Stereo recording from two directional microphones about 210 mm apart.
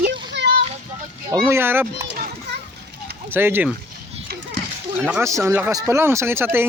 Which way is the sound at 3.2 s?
10° right (ahead or behind).